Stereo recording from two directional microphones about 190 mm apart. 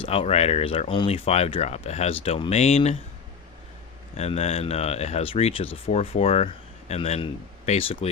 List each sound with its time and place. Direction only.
0.0 s speech: 30° left (ahead or behind)
4.2 s speech: 35° left (ahead or behind)